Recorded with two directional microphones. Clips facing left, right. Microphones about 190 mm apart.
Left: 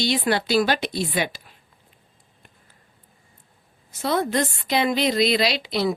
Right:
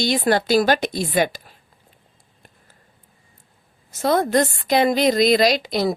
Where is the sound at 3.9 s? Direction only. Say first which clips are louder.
Right 4 dB; 45° right (ahead or behind).